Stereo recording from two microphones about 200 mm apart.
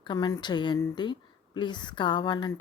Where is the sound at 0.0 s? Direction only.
20° left (ahead or behind).